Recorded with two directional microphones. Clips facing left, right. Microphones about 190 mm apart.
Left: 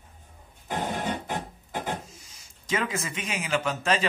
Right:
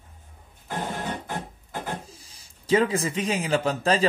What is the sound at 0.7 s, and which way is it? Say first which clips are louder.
Music: left 1 dB; 15° left (ahead or behind).